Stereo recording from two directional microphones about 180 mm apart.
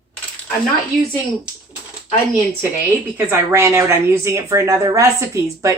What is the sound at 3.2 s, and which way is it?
A woman's voice, 15° right (ahead or behind).